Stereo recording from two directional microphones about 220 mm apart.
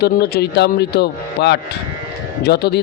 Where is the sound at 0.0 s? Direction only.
45° left (ahead or behind).